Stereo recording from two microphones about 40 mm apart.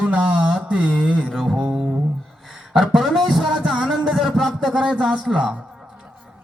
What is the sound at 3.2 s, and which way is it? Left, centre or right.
Speech, centre.